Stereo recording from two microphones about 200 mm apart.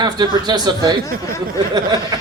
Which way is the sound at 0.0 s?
20° right (ahead or behind).